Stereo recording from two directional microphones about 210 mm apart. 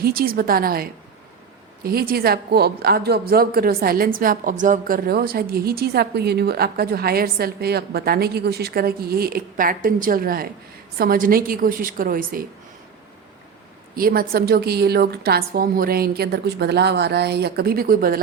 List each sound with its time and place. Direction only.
0.0 s a woman's voice: 45° right (ahead or behind)
13.9 s a woman's voice: 45° right (ahead or behind)